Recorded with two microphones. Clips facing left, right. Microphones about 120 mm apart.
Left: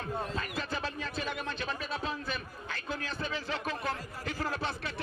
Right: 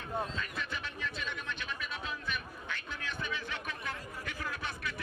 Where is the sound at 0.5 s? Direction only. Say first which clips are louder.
Left 5 dB; 35° left (ahead or behind).